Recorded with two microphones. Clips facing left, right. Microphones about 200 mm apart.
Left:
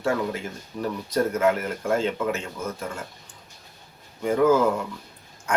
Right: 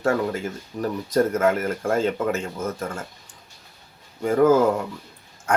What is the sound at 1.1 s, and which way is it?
Speech, 50° right (ahead or behind).